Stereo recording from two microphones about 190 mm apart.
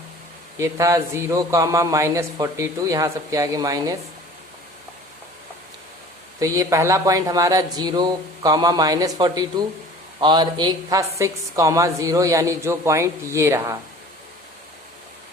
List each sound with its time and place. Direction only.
0.6 s a woman's voice: 15° right (ahead or behind)
6.4 s a woman's voice: 15° right (ahead or behind)